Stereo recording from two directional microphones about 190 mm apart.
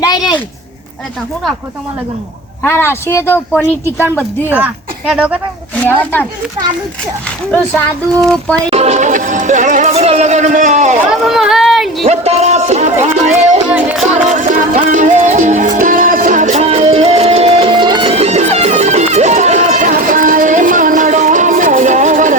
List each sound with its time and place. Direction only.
0.0 s a sound: 20° left (ahead or behind)
2.6 s speech: 10° left (ahead or behind)
4.4 s speech: 10° right (ahead or behind)
5.8 s speech: 10° left (ahead or behind)
8.2 s speech: 5° left (ahead or behind)
8.7 s music: 35° right (ahead or behind)
11.1 s a sound: centre (ahead or behind)
12.0 s a sound: 35° right (ahead or behind)
13.7 s music: 5° right (ahead or behind)
14.3 s music: 40° right (ahead or behind)